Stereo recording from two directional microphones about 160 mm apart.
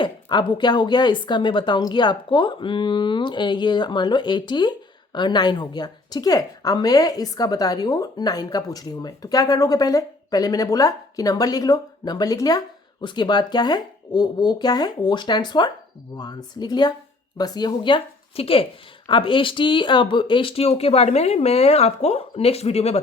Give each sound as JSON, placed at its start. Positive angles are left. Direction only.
{"t": 0.0, "sound": "a woman's voice", "side_deg": 30}